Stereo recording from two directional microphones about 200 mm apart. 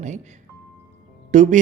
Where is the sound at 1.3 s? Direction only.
35° right (ahead or behind).